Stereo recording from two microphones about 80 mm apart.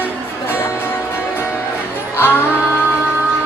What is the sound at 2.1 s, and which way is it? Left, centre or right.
Music, left.